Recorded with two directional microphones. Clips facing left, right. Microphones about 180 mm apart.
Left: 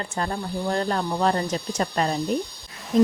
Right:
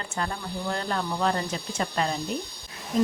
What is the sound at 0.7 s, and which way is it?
Speech, 40° left (ahead or behind).